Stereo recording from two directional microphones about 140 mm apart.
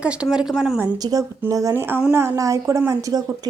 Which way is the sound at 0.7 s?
20° right (ahead or behind).